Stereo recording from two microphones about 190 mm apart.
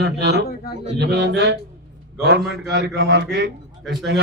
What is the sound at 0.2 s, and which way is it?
A man's voice, 60° right (ahead or behind).